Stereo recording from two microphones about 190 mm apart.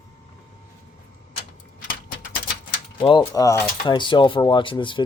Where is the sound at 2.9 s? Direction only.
30° left (ahead or behind).